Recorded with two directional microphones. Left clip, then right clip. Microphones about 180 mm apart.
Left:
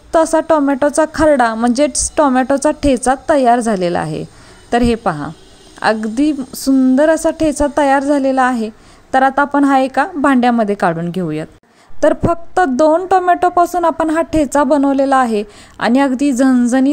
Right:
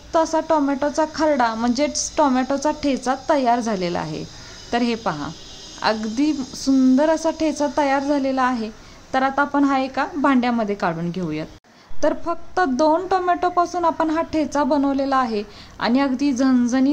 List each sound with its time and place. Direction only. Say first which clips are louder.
0.1 s a woman's voice: left 7 dB; 40° left (ahead or behind)